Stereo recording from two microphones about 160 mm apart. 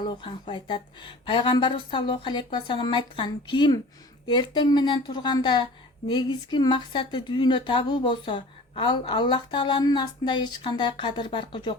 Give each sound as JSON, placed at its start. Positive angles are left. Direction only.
{"t": 0.1, "sound": "speech", "side_deg": 30}